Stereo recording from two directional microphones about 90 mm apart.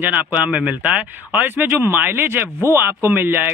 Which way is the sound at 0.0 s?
20° right (ahead or behind).